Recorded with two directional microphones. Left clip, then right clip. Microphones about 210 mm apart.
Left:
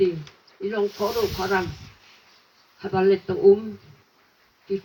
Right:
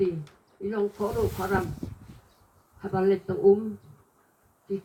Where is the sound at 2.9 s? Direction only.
35° left (ahead or behind).